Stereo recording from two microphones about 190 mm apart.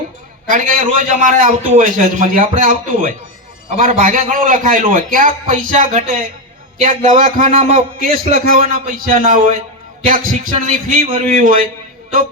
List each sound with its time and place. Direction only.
0.5 s a man's voice: 45° right (ahead or behind)